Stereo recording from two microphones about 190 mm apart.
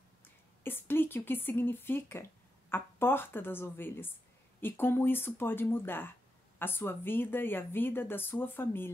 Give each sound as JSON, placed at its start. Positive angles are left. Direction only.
{"t": 0.7, "sound": "a woman's voice", "side_deg": 10}